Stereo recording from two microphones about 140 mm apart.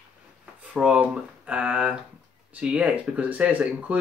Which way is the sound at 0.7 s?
10° right (ahead or behind).